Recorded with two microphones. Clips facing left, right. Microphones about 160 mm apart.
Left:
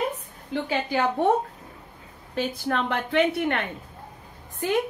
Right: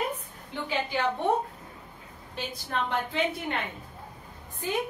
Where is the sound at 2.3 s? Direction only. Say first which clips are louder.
Left 7 dB; 70° left (ahead or behind).